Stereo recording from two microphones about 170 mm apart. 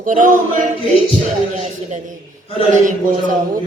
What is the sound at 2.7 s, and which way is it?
Music, 50° right (ahead or behind).